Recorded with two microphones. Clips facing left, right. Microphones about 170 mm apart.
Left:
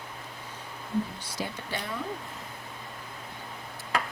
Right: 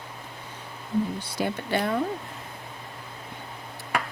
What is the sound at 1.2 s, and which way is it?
Speech, 60° right (ahead or behind).